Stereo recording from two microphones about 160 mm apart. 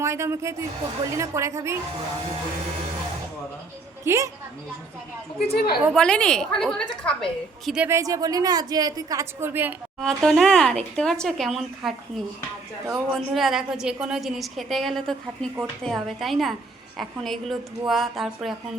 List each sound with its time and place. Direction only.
0.0 s a woman's voice: 15° right (ahead or behind)
4.0 s speech: 20° right (ahead or behind)
5.4 s a woman's voice: 75° left (ahead or behind)
5.9 s a woman's voice: 5° left (ahead or behind)
7.9 s a woman's voice: 20° right (ahead or behind)
10.0 s a woman's voice: centre (ahead or behind)